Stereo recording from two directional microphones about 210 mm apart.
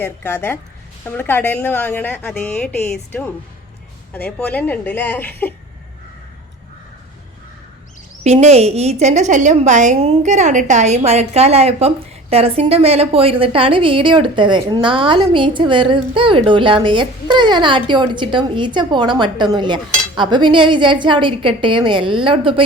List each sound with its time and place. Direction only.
0.0 s a woman's voice: 10° left (ahead or behind)
8.2 s a woman's voice: 30° right (ahead or behind)